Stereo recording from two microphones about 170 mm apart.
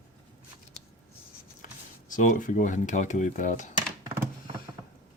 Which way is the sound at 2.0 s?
50° left (ahead or behind).